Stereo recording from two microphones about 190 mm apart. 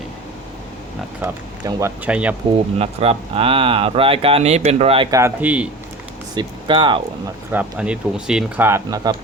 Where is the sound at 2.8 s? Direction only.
30° right (ahead or behind).